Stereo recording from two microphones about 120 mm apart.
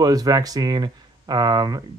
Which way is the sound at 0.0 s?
30° right (ahead or behind).